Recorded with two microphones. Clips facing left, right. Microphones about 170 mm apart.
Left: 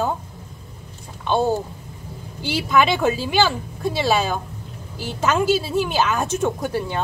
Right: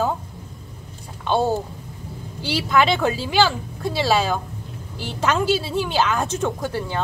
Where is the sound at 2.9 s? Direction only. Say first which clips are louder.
Left 1 dB; 5° left (ahead or behind).